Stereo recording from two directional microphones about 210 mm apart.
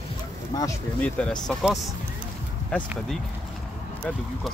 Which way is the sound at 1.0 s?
5° left (ahead or behind).